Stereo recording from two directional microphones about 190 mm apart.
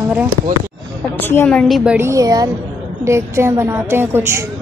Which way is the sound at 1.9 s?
15° right (ahead or behind).